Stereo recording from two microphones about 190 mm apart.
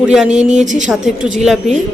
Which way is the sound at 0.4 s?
40° right (ahead or behind).